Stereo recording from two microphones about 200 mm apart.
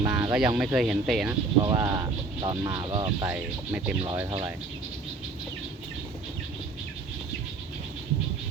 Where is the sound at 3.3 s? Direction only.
5° right (ahead or behind).